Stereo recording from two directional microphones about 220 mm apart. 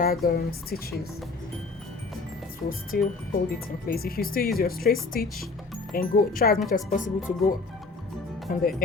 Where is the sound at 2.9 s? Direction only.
45° left (ahead or behind).